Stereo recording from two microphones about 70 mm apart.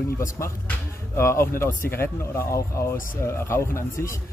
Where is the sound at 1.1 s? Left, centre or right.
Left.